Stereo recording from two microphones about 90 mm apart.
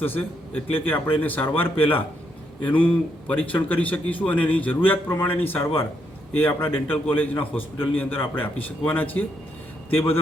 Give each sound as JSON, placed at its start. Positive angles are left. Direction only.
{"t": 0.0, "sound": "a man's voice", "side_deg": 20}